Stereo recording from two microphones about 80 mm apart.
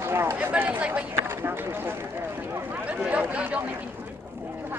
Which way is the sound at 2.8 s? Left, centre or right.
Centre.